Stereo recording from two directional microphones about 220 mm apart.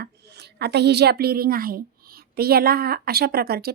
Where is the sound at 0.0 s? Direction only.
50° right (ahead or behind).